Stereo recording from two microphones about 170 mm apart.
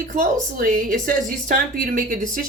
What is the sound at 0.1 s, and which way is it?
A woman's voice, 55° right (ahead or behind).